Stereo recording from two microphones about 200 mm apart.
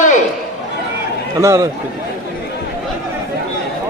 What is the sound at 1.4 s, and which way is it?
Speech, 15° right (ahead or behind).